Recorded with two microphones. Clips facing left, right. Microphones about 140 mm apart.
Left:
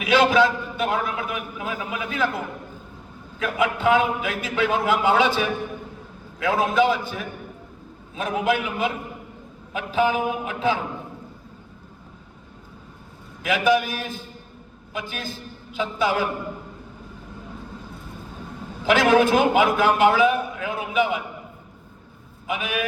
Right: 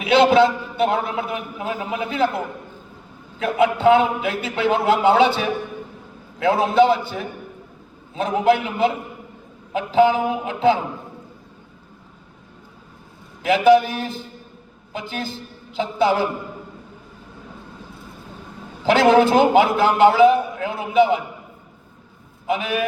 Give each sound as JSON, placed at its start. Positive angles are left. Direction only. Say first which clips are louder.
{"t": 0.0, "sound": "a man's voice", "louder": "right 4 dB", "side_deg": -30}
{"t": 3.4, "sound": "a man's voice", "louder": "right 5 dB", "side_deg": -30}
{"t": 6.4, "sound": "a man's voice", "louder": "right 4 dB", "side_deg": -30}
{"t": 13.4, "sound": "a man's voice", "louder": "right 6 dB", "side_deg": -30}
{"t": 18.9, "sound": "a man's voice", "louder": "right 3 dB", "side_deg": -30}
{"t": 22.4, "sound": "a man's voice", "louder": "right 5 dB", "side_deg": -35}